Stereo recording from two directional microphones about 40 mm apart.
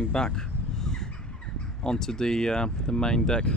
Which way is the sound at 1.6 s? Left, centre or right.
Centre.